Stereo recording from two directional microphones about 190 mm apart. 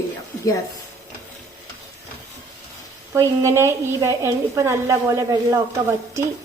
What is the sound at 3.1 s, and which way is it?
A woman's voice, 15° right (ahead or behind).